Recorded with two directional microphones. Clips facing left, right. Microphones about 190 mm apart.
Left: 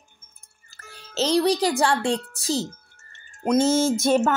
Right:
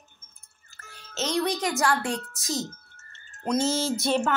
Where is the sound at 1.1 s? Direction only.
35° left (ahead or behind).